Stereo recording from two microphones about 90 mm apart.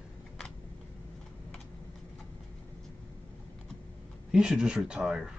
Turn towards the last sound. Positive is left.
turn(degrees=-5)  # may be behind; listen again after turning